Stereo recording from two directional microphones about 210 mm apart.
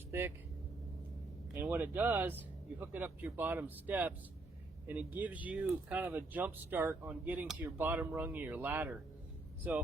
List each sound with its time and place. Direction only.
0.1 s speech: 10° right (ahead or behind)
1.5 s speech: 10° right (ahead or behind)